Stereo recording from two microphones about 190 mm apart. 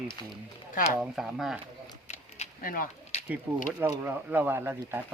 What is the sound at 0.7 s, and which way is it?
Speech, 45° left (ahead or behind).